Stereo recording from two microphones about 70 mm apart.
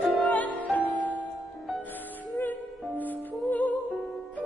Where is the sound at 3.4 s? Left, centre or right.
Left.